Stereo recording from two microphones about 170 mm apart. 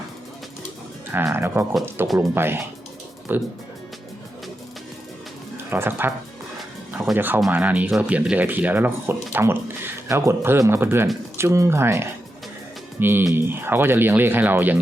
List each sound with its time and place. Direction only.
1.1 s speech: 10° right (ahead or behind)
5.7 s speech: 15° right (ahead or behind)
7.2 s speech: 10° right (ahead or behind)